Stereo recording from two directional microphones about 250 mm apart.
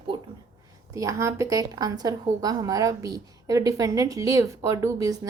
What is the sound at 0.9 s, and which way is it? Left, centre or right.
A woman's voice, centre.